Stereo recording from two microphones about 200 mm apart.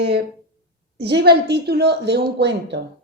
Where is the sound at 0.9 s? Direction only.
55° right (ahead or behind).